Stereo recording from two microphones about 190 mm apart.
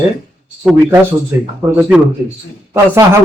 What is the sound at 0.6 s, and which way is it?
Speech, 5° right (ahead or behind).